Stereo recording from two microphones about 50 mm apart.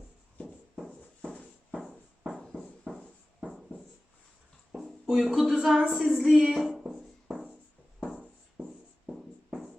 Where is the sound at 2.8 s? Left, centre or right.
Centre.